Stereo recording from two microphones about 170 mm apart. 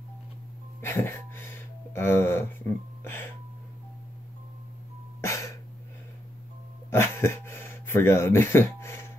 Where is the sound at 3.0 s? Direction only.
15° left (ahead or behind).